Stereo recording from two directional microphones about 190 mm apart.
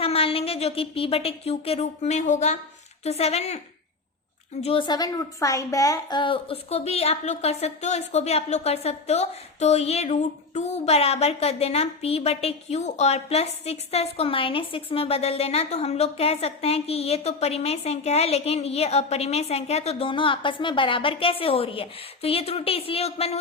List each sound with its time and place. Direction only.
0.0 s a woman's voice: 30° left (ahead or behind)
4.6 s a woman's voice: 25° left (ahead or behind)